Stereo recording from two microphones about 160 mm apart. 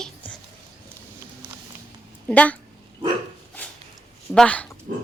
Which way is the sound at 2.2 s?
10° left (ahead or behind).